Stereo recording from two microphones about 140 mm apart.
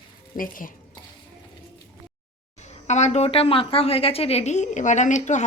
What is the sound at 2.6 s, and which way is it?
Speech, 55° left (ahead or behind).